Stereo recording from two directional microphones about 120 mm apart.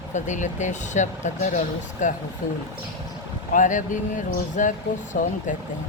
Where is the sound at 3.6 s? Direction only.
90° left.